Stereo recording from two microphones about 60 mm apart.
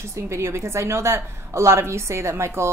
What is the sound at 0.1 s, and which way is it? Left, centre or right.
A woman's voice, right.